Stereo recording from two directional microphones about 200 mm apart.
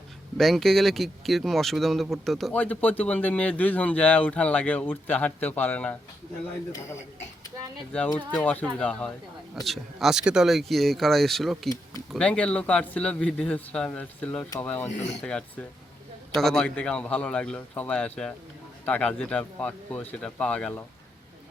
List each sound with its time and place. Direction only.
0.3 s speech: centre (ahead or behind)
8.3 s speech: 10° left (ahead or behind)